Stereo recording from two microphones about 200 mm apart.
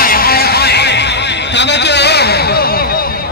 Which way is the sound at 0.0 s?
50° left (ahead or behind).